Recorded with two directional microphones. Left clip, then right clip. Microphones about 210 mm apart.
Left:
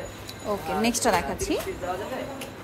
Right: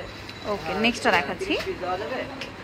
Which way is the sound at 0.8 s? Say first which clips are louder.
Right 3 dB; 15° left (ahead or behind).